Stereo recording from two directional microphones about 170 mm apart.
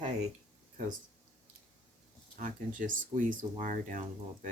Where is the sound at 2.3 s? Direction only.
55° right (ahead or behind).